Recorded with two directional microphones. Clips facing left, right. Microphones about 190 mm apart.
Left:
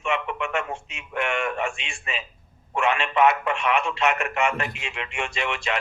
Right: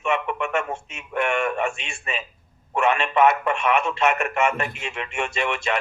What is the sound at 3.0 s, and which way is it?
Speech, 45° right (ahead or behind).